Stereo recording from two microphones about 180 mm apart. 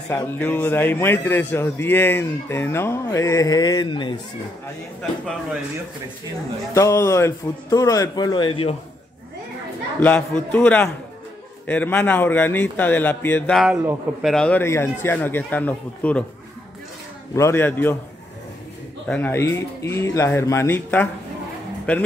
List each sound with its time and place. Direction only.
0.1 s speech: 10° left (ahead or behind)
6.7 s speech: 15° left (ahead or behind)
9.9 s speech: 10° left (ahead or behind)
13.6 s speech: 5° right (ahead or behind)
17.4 s speech: 15° left (ahead or behind)
19.0 s speech: 10° left (ahead or behind)